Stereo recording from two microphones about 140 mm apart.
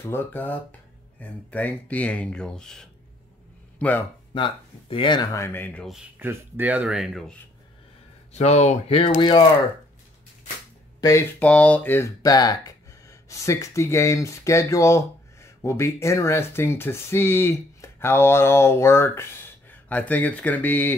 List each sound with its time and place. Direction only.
0.0 s speech: 15° left (ahead or behind)
4.3 s speech: 40° left (ahead or behind); by 5.9 s 10° left (ahead or behind)
5.9 s speech: 15° right (ahead or behind)
8.3 s speech: 50° left (ahead or behind)
11.0 s speech: 25° left (ahead or behind)
11.3 s speech: 10° left (ahead or behind)